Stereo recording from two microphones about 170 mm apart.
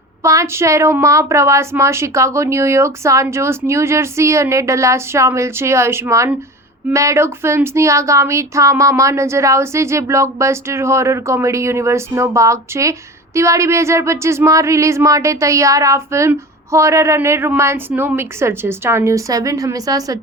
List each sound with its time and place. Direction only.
0.2 s speech: 15° right (ahead or behind)